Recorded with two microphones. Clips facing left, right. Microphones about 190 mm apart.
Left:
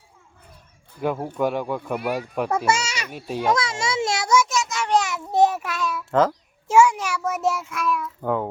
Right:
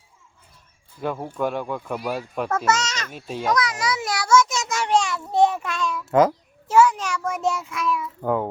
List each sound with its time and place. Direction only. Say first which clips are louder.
1.0 s a child's voice: left 2 dB; 5° left (ahead or behind)
3.5 s a child's voice: right 2 dB; 25° left (ahead or behind)
4.6 s a sound: right 1 dB; 45° right (ahead or behind)
4.9 s babbling: right 1 dB; 5° left (ahead or behind)
6.1 s a child's voice: right 2 dB; 10° right (ahead or behind)
6.7 s a child's voice: even; 10° left (ahead or behind)